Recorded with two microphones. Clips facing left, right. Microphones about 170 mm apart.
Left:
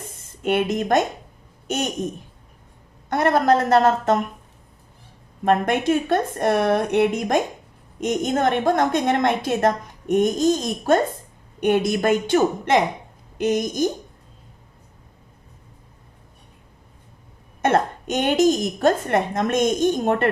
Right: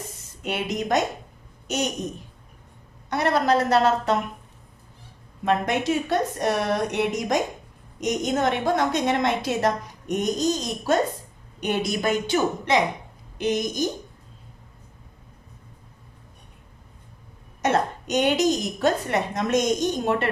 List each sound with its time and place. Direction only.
0.4 s a woman's voice: 55° left (ahead or behind)
3.1 s a woman's voice: 50° left (ahead or behind)
5.5 s a woman's voice: 55° left (ahead or behind)
17.6 s a woman's voice: 55° left (ahead or behind)